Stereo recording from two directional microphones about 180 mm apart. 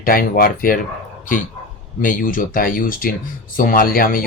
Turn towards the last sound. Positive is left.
turn(degrees=50)  # may be behind; listen again after turning